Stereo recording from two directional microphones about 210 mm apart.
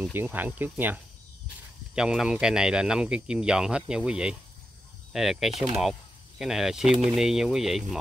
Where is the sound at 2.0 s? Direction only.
5° right (ahead or behind).